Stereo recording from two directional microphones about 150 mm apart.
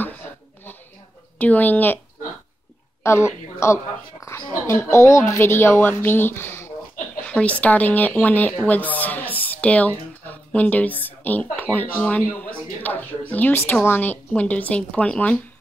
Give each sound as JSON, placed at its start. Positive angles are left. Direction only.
{"t": 1.4, "sound": "a woman's voice", "side_deg": 10}
{"t": 3.0, "sound": "a woman's voice", "side_deg": 15}